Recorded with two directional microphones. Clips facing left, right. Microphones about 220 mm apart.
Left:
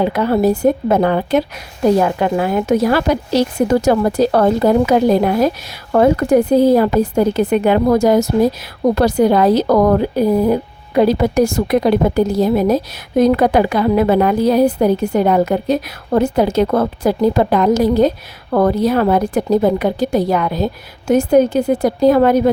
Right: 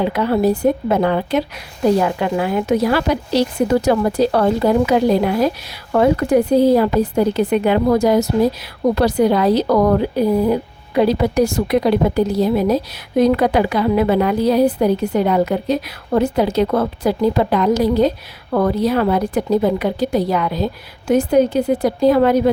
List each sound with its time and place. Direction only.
0.1 s a woman's voice: 45° left (ahead or behind)